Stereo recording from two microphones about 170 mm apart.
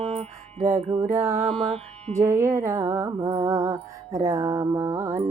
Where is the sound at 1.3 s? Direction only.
40° right (ahead or behind).